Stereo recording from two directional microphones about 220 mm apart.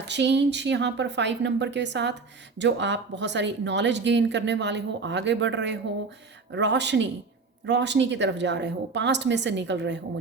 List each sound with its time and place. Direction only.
0.1 s speech: 55° right (ahead or behind)